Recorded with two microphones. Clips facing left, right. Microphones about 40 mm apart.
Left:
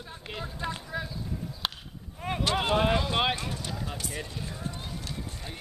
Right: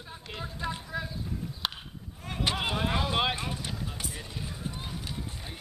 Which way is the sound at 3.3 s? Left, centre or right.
Centre.